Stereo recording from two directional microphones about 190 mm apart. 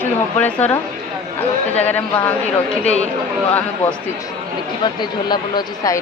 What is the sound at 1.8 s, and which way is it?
Speech, 10° left (ahead or behind).